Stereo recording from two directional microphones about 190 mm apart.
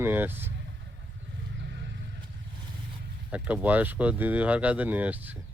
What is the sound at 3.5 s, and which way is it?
Speech, 10° right (ahead or behind).